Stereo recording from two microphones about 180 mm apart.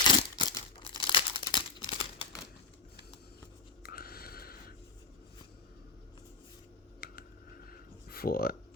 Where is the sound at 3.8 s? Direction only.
55° left (ahead or behind).